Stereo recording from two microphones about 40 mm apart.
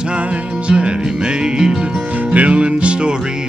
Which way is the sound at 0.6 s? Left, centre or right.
Right.